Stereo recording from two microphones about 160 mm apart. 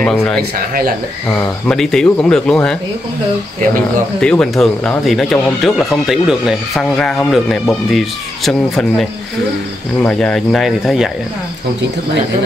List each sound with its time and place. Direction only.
0.0 s speech: 5° left (ahead or behind)
0.4 s speech: 65° right (ahead or behind)
1.3 s speech: 5° left (ahead or behind)
4.2 s speech: 5° left (ahead or behind)